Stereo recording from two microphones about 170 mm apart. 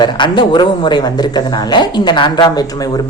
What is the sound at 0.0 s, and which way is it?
A man's voice, 25° left (ahead or behind).